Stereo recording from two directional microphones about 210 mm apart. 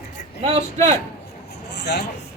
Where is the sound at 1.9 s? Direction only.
50° left (ahead or behind).